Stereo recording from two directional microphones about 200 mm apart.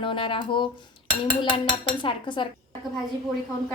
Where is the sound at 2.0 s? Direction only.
25° left (ahead or behind).